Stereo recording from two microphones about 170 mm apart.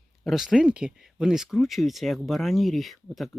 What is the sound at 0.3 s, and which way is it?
Speech, centre (ahead or behind).